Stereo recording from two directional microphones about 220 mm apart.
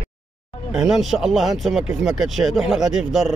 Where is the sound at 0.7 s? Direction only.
Centre (ahead or behind).